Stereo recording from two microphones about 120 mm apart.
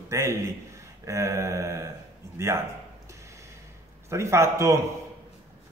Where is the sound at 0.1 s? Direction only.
25° right (ahead or behind).